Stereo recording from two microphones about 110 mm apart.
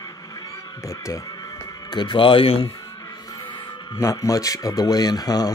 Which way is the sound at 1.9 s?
45° left (ahead or behind).